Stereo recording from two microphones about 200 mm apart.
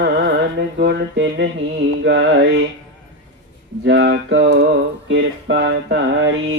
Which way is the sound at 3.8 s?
60° right (ahead or behind).